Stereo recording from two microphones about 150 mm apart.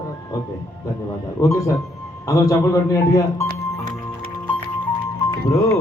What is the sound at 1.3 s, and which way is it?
A man's voice, 20° left (ahead or behind).